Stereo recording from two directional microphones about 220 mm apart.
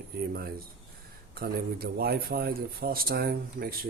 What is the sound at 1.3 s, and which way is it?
A man's voice, 45° right (ahead or behind).